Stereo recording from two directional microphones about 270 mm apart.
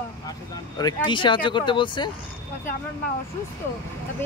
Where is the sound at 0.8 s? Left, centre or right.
Centre.